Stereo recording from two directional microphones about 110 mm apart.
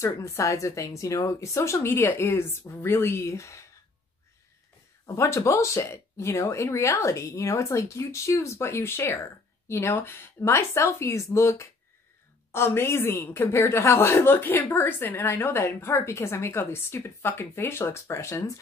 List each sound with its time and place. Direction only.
0.0 s speech: 25° left (ahead or behind)
5.0 s speech: 25° left (ahead or behind)